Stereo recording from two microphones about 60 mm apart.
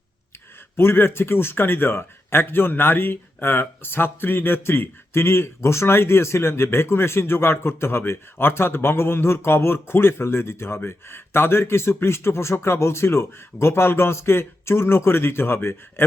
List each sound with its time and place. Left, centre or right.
0.8 s a man's voice: left